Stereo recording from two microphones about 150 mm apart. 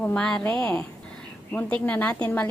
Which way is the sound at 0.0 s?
5° left (ahead or behind).